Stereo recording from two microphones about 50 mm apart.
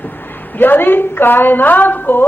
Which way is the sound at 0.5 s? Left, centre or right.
Left.